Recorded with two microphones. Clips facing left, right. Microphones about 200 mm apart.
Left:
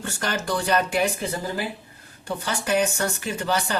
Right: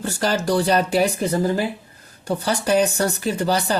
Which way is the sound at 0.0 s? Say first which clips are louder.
Right 6 dB; 35° right (ahead or behind).